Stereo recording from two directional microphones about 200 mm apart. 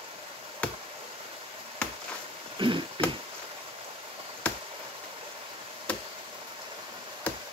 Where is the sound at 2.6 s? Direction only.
25° right (ahead or behind).